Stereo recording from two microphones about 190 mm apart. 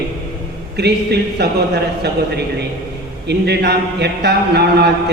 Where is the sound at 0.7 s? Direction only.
60° right (ahead or behind).